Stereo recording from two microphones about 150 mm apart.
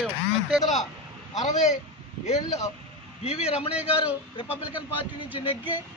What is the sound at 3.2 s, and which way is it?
Speech, 40° left (ahead or behind).